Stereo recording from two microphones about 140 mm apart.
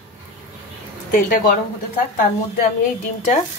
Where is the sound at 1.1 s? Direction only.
75° left (ahead or behind).